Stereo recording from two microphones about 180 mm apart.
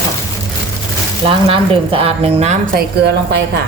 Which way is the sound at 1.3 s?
30° right (ahead or behind).